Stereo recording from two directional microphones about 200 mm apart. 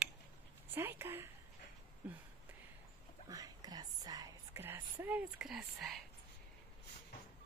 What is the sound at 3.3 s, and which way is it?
Whispering, 20° right (ahead or behind).